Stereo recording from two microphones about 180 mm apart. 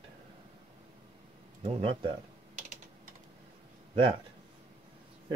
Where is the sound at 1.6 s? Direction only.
35° right (ahead or behind).